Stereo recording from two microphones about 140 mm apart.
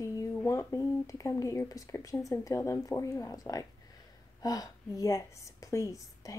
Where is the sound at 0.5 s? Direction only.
25° left (ahead or behind).